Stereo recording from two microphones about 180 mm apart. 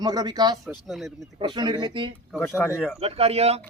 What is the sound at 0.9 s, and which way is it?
Speech, centre (ahead or behind).